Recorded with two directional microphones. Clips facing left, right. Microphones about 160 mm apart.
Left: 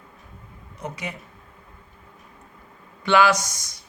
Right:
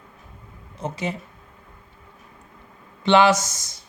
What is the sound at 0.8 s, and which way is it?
Speech, 30° right (ahead or behind).